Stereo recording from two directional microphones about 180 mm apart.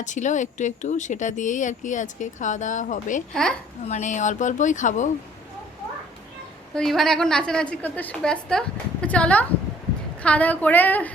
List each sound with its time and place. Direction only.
0.0 s speech: 45° left (ahead or behind)
6.7 s a woman's voice: centre (ahead or behind)